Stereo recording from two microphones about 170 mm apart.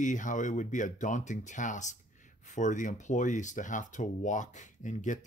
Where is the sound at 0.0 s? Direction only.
50° left (ahead or behind).